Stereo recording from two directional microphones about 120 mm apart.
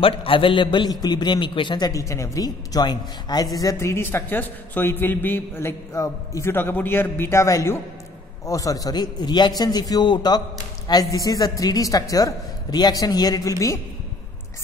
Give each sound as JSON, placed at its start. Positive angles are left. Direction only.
{"t": 0.0, "sound": "a man's voice", "side_deg": 45}
{"t": 1.9, "sound": "a man's voice", "side_deg": 25}
{"t": 3.5, "sound": "a man's voice", "side_deg": 25}